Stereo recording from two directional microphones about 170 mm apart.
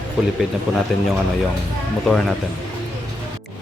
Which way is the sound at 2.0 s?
Centre (ahead or behind).